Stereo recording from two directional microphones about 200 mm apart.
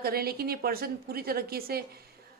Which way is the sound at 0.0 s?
50° right (ahead or behind).